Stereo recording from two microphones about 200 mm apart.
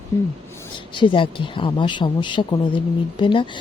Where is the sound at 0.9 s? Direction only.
25° left (ahead or behind).